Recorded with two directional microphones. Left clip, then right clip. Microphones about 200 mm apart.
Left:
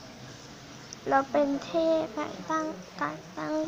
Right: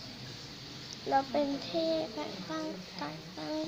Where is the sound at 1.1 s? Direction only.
20° left (ahead or behind).